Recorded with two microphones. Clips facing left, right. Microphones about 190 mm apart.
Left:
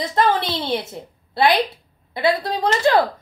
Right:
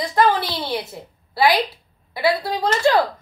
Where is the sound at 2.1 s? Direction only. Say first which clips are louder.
Left 1 dB; 20° left (ahead or behind).